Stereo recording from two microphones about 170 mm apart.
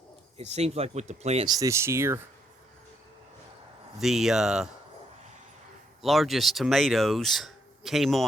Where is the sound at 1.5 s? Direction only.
20° right (ahead or behind).